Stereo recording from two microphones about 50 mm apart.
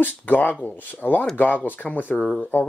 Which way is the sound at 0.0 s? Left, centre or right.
Left.